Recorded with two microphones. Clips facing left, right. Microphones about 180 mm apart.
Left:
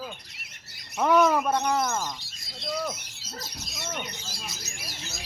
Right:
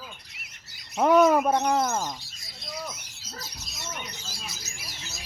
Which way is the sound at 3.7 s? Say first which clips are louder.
Left 3 dB; 60° left (ahead or behind).